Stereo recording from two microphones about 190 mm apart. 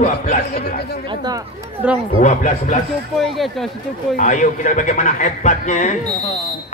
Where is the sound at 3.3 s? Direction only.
Centre (ahead or behind).